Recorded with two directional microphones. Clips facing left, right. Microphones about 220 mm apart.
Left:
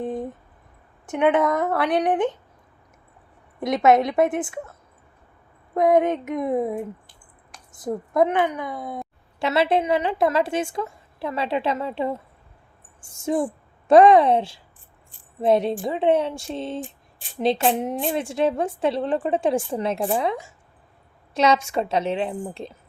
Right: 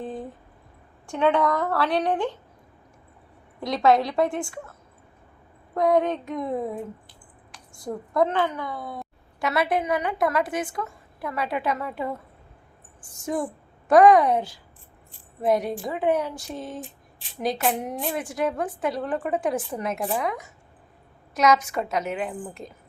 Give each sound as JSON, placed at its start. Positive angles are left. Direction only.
{"t": 0.0, "sound": "a sound", "side_deg": 20}
{"t": 1.0, "sound": "a woman's voice", "side_deg": 20}
{"t": 3.6, "sound": "a woman's voice", "side_deg": 20}
{"t": 5.7, "sound": "a woman's voice", "side_deg": 20}